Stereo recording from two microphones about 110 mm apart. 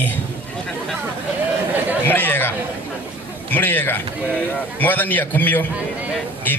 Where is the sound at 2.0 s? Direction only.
15° left (ahead or behind).